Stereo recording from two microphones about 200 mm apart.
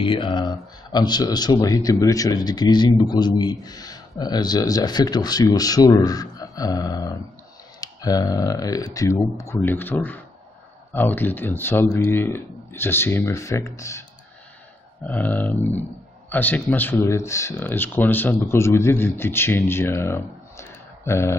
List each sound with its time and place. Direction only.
0.0 s speech: 25° left (ahead or behind)
15.0 s speech: 15° left (ahead or behind)